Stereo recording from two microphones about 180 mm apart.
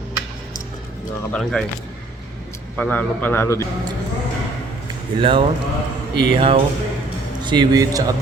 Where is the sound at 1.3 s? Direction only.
Centre (ahead or behind).